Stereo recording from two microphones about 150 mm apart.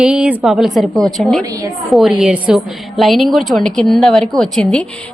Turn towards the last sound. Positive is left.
turn(degrees=5)  # may be behind; listen again after turning